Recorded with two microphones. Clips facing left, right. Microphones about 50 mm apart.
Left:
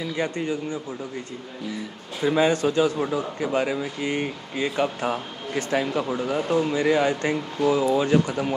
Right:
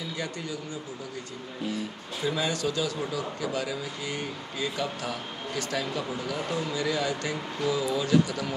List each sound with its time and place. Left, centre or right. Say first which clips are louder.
0.0 s speech: left 8 dB; left
2.2 s a man's voice: left 8 dB; left